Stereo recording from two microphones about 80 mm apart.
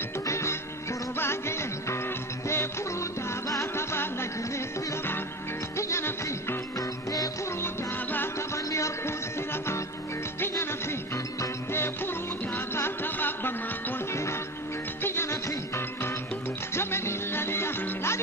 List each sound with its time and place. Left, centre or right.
0.3 s music: left
5.8 s music: left
7.6 s music: left
8.6 s music: left